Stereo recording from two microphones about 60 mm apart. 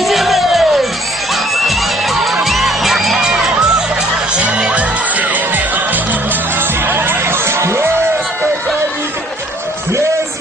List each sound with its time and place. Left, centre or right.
0.0 s music: centre
4.4 s music: centre; by 7.9 s right